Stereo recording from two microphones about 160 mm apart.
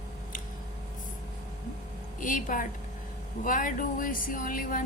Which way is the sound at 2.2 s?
55° left (ahead or behind).